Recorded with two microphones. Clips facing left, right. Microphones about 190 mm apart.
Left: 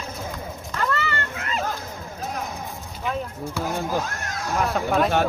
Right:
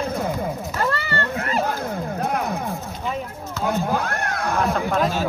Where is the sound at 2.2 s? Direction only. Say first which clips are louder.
Right 5 dB; 60° right (ahead or behind).